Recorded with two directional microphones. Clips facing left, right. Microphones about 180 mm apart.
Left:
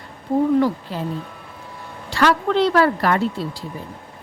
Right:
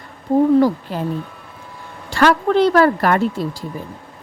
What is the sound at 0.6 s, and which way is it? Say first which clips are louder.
Speech: right 4 dB; 50° right (ahead or behind).